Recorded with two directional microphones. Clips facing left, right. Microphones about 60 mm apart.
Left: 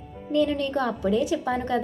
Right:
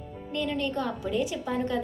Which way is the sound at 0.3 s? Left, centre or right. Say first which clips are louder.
Left 6 dB; left.